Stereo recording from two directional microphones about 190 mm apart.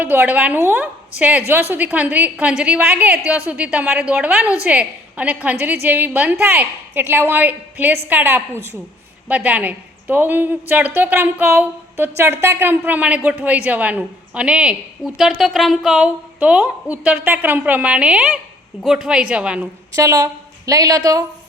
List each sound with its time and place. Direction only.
0.0 s a woman's voice: 10° right (ahead or behind)
20.0 s a woman's voice: 15° right (ahead or behind)